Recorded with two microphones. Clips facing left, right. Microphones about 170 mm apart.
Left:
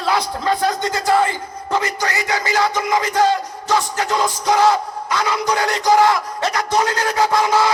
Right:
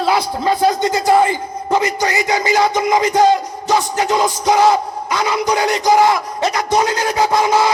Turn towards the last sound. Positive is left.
turn(degrees=-15)  # may be behind; listen again after turning